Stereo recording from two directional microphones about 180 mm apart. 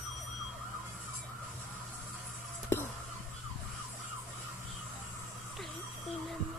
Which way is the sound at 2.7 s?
10° left (ahead or behind).